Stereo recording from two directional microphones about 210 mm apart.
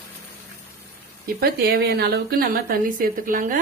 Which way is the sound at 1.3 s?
45° right (ahead or behind).